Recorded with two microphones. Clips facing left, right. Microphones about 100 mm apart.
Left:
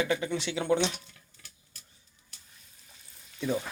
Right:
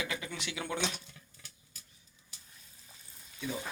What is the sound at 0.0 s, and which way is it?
Speech, 35° left (ahead or behind).